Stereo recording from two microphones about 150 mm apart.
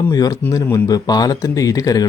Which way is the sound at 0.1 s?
25° left (ahead or behind).